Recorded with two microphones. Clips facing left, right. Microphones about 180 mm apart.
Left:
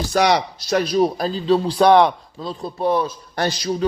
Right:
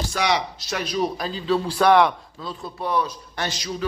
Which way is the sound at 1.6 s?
20° left (ahead or behind).